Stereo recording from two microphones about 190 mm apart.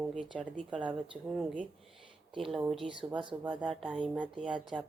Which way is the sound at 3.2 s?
25° right (ahead or behind).